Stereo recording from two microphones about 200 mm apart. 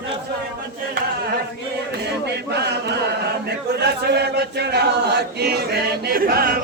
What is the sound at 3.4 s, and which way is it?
Speech, 55° right (ahead or behind).